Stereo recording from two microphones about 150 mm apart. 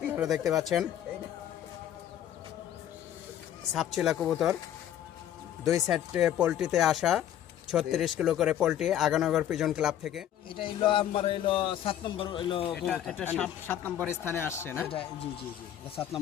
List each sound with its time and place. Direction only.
0.1 s speech: 5° right (ahead or behind)
3.8 s speech: centre (ahead or behind)
5.9 s speech: 5° right (ahead or behind)
10.5 s a man's voice: 35° left (ahead or behind)
12.7 s speech: 5° left (ahead or behind)